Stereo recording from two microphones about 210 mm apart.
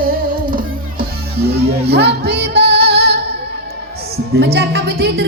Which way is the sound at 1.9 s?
50° right (ahead or behind).